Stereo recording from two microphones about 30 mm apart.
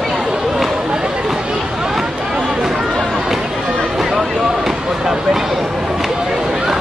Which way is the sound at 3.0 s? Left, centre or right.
Centre.